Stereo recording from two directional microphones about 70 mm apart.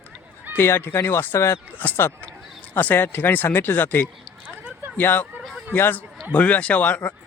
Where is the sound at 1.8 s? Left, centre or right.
Left.